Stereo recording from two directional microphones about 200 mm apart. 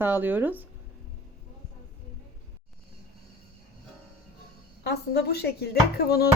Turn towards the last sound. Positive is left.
turn(degrees=50)  # may be behind; listen again after turning